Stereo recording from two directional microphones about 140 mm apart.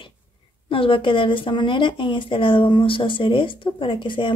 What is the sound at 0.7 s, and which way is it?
Speech, 40° left (ahead or behind).